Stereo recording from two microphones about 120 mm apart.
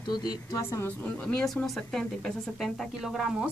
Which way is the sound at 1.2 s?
5° left (ahead or behind).